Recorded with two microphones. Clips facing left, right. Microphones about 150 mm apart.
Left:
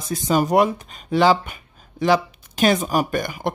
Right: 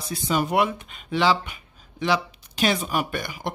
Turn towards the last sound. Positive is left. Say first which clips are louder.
# left 6 dB
turn(degrees=50)  # may be behind; listen again after turning